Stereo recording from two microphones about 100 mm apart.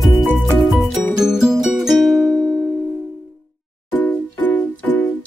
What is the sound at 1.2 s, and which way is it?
Music, 5° right (ahead or behind).